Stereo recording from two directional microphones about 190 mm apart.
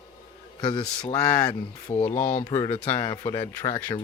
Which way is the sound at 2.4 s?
15° left (ahead or behind).